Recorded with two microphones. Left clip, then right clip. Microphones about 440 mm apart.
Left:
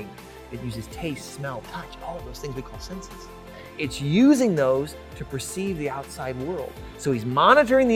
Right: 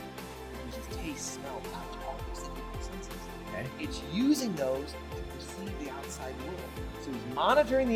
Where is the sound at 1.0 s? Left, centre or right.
Left.